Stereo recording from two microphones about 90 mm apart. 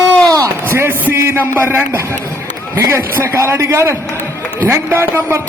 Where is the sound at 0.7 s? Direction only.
25° right (ahead or behind).